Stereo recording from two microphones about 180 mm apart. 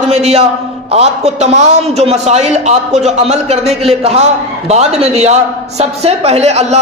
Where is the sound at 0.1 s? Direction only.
35° right (ahead or behind).